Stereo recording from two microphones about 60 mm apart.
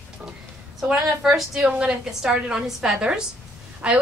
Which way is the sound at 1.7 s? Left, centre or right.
Centre.